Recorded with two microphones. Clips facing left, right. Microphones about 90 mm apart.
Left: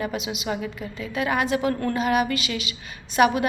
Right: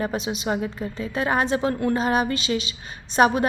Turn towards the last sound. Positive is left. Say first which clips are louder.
# right 1 dB
turn(degrees=-35)  # may be behind; listen again after turning